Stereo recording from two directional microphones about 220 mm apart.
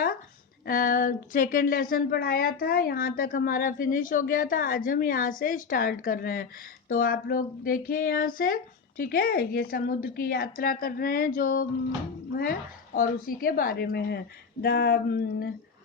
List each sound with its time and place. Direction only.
0.6 s a woman's voice: 40° left (ahead or behind)